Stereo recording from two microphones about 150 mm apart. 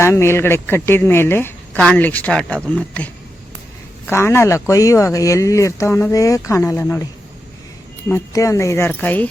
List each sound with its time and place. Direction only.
0.0 s a woman's voice: 15° left (ahead or behind)
8.1 s a woman's voice: 20° left (ahead or behind)